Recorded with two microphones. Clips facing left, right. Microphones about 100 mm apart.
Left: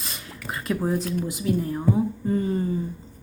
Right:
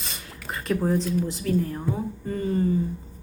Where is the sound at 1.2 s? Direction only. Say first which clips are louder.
Left 2 dB; 15° left (ahead or behind).